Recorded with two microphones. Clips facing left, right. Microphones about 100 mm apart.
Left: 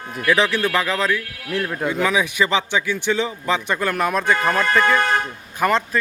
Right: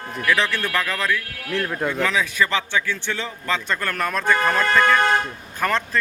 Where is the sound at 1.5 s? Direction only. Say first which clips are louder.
Left 1 dB; 5° left (ahead or behind).